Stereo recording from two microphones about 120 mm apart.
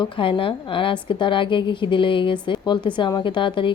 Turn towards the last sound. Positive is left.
turn(degrees=45)  # may be behind; listen again after turning